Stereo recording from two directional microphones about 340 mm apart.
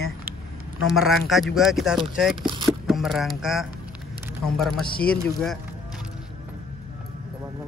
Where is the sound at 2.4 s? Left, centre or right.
Centre.